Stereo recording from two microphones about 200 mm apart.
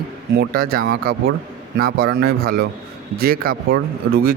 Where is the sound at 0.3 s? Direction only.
50° right (ahead or behind).